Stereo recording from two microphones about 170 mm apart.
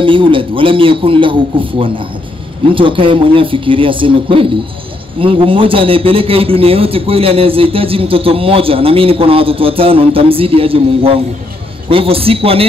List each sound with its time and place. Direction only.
0.0 s a man's voice: 30° right (ahead or behind)